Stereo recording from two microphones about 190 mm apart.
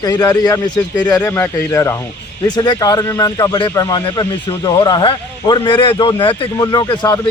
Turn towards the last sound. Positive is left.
turn(degrees=20)  # may be behind; listen again after turning